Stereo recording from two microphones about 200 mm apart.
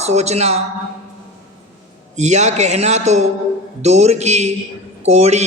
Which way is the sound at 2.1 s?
35° right (ahead or behind).